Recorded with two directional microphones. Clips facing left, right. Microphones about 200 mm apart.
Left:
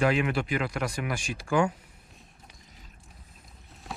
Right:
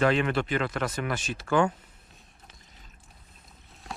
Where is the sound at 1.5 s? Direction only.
25° left (ahead or behind).